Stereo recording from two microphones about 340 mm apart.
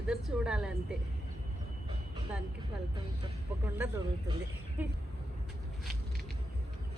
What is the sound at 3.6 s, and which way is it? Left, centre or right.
Speech, centre.